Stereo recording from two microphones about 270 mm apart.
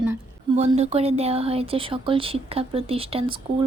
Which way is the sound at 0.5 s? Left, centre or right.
Right.